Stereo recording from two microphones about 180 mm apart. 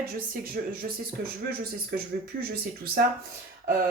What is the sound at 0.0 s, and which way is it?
Speech, 55° right (ahead or behind).